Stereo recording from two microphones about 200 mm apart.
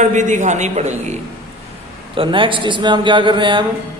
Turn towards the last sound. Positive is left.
turn(degrees=-25)  # may be behind; listen again after turning